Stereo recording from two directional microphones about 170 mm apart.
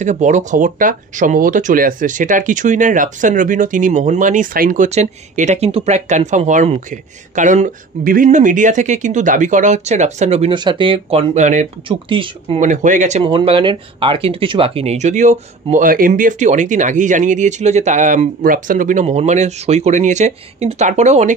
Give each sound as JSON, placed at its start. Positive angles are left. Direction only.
{"t": 0.0, "sound": "speech", "side_deg": -45}
{"t": 12.1, "sound": "speech", "side_deg": -30}
{"t": 12.5, "sound": "speech", "side_deg": -45}
{"t": 13.2, "sound": "speech", "side_deg": -30}